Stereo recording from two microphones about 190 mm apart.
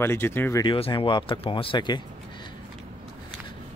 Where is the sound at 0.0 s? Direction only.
10° left (ahead or behind).